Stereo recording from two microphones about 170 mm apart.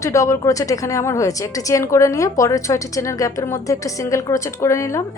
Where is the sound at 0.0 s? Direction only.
20° left (ahead or behind).